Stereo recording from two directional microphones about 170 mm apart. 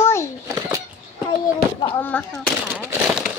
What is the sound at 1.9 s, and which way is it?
Speech, 10° left (ahead or behind).